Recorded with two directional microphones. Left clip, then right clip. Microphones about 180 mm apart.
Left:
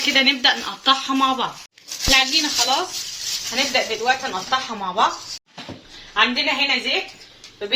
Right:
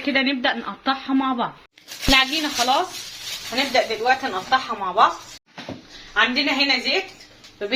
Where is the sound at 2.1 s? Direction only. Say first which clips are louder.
Left 1 dB; 55° right (ahead or behind).